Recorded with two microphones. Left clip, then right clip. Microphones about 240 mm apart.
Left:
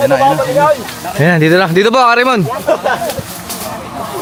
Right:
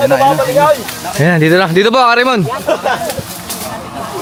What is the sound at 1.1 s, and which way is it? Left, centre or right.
Speech, centre.